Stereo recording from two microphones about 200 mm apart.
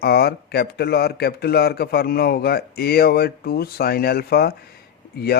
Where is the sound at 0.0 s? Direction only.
50° left (ahead or behind).